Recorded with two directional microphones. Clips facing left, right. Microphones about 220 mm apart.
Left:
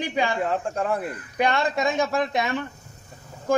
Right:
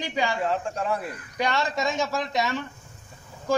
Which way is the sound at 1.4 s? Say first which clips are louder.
Left 3 dB; 55° left (ahead or behind).